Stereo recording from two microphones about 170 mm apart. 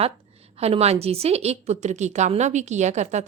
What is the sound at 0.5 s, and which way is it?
A woman's voice, 35° right (ahead or behind).